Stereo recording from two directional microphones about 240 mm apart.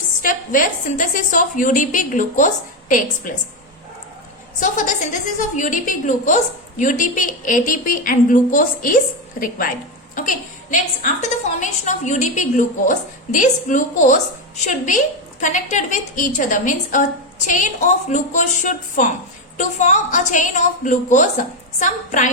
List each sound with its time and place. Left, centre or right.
0.2 s a woman's voice: left
4.6 s a woman's voice: left